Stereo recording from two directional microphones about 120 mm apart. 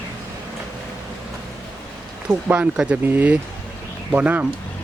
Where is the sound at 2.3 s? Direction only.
10° right (ahead or behind).